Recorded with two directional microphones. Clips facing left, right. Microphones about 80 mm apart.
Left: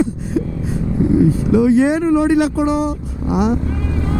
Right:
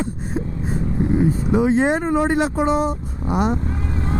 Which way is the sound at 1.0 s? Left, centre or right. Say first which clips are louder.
Left 5 dB; right.